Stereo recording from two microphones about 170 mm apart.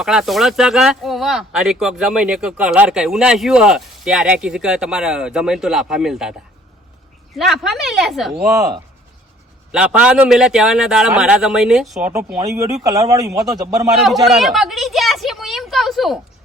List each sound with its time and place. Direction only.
0.0 s speech: 5° right (ahead or behind)
7.3 s speech: centre (ahead or behind)
9.7 s speech: 5° right (ahead or behind)
12.4 s speech: 20° right (ahead or behind)
14.0 s a sound: centre (ahead or behind)